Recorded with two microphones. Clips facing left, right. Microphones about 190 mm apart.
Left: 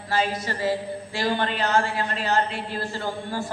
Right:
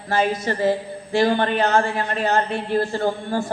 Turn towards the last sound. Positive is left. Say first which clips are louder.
# right 7 dB
turn(degrees=-50)  # may be behind; listen again after turning